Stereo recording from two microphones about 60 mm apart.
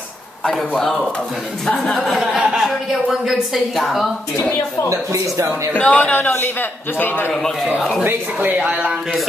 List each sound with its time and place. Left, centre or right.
0.6 s speech: centre
2.3 s speech: centre
2.6 s speech: centre
4.8 s speech: right
5.8 s a man's voice: left
7.6 s speech: centre
8.0 s speech: right